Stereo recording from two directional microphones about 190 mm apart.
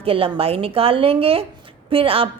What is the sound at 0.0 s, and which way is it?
A woman's voice, 30° right (ahead or behind).